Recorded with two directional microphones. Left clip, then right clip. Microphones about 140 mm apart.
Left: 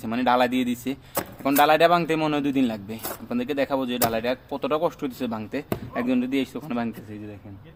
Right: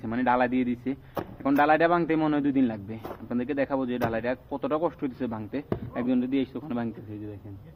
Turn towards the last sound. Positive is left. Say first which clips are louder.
# left 3 dB
turn(degrees=25)  # may be behind; listen again after turning